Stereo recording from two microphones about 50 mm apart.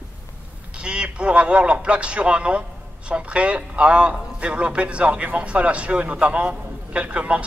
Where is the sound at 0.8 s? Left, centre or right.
Right.